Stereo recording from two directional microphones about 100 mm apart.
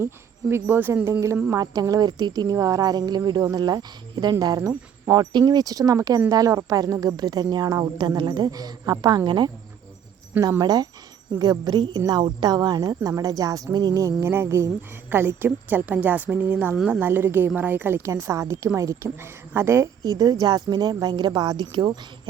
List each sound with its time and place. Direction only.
0.5 s a woman's voice: 20° right (ahead or behind)
1.5 s speech: 40° right (ahead or behind)
10.6 s a woman's voice: 40° right (ahead or behind); by 16.7 s 15° right (ahead or behind)
16.7 s a woman's voice: 5° right (ahead or behind)
17.0 s a woman's voice: 20° right (ahead or behind); by 21.9 s 45° right (ahead or behind)